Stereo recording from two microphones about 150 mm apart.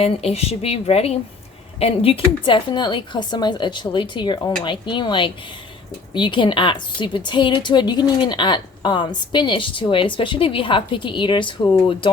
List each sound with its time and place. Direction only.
0.0 s a woman's voice: 40° left (ahead or behind)